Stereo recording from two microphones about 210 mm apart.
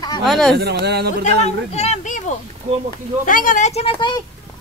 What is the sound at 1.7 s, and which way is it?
Speech, 30° left (ahead or behind).